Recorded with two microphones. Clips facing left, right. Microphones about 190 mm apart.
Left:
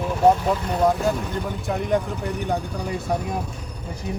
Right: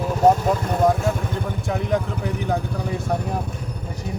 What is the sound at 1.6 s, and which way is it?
Speech, centre (ahead or behind).